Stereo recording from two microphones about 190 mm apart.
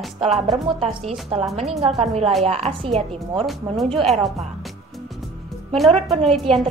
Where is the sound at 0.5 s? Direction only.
25° right (ahead or behind).